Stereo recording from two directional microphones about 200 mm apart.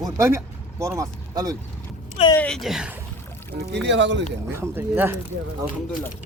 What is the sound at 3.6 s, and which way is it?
Speech, 60° right (ahead or behind).